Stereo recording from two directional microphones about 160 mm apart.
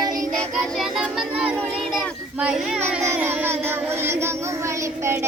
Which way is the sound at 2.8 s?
15° right (ahead or behind).